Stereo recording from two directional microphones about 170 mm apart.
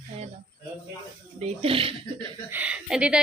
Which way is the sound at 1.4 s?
35° right (ahead or behind).